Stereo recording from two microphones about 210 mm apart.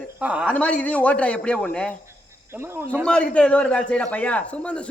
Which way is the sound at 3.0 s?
5° left (ahead or behind).